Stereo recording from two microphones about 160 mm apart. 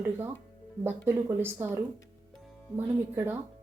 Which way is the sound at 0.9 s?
15° right (ahead or behind).